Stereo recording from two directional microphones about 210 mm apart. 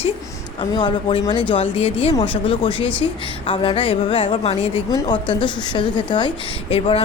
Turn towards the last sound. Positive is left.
turn(degrees=25)  # may be behind; listen again after turning